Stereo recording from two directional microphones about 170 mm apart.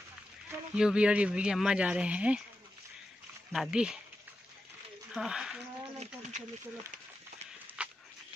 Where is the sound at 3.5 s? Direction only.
5° right (ahead or behind).